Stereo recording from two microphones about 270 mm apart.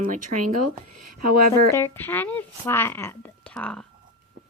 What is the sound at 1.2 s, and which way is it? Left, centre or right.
Speech, right.